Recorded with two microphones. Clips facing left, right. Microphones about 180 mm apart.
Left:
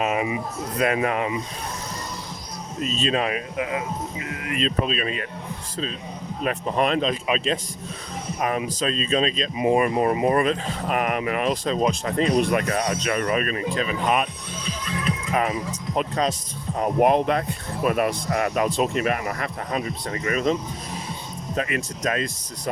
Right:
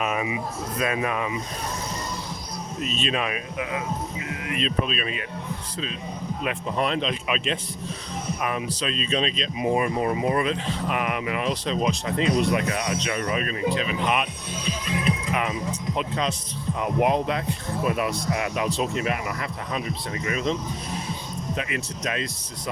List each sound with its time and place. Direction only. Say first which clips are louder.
0.0 s a sound: left 3 dB; 30° left (ahead or behind)
3.0 s speech: left 4 dB; 35° left (ahead or behind)
6.7 s speech: left 4 dB; 50° left (ahead or behind); by 7.6 s 35° left (ahead or behind)
8.4 s speech: left 5 dB; 45° left (ahead or behind)
9.6 s speech: left 4 dB; 60° left (ahead or behind); by 14.3 s 40° left (ahead or behind)
14.6 s music: right 2 dB; 15° right (ahead or behind)
15.3 s music: left 3 dB; 40° left (ahead or behind)
16.0 s speech: left 5 dB; 40° left (ahead or behind)
17.1 s speech: left 3 dB; 55° left (ahead or behind)